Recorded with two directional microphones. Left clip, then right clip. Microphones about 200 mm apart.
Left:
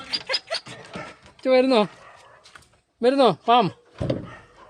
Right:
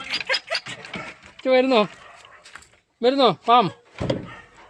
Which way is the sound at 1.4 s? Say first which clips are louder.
Even; 5° left (ahead or behind).